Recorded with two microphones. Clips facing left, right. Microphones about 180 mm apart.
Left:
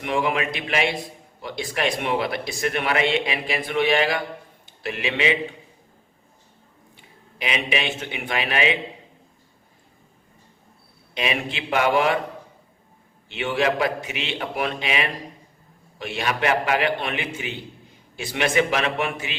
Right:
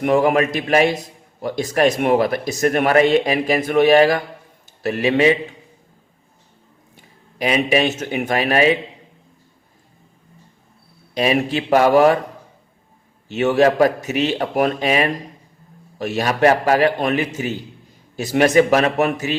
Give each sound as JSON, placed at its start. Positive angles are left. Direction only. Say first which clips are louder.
{"t": 0.0, "sound": "a man's voice", "louder": "right 8 dB", "side_deg": -45}
{"t": 6.9, "sound": "speech", "louder": "right 5 dB", "side_deg": -40}
{"t": 11.1, "sound": "a man's voice", "louder": "right 9 dB", "side_deg": -40}
{"t": 13.2, "sound": "a man's voice", "louder": "right 8 dB", "side_deg": -40}